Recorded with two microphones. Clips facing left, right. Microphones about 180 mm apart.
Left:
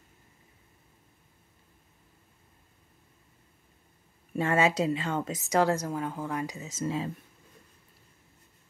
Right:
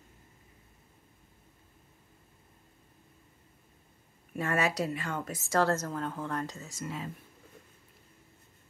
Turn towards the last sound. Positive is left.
turn(degrees=30)  # may be behind; listen again after turning